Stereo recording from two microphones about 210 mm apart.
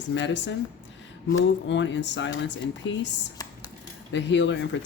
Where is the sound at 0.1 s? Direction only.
60° left (ahead or behind).